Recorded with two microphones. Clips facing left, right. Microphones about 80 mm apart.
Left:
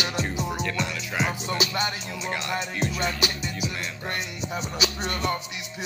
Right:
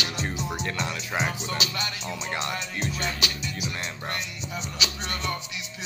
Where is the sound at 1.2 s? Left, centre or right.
Left.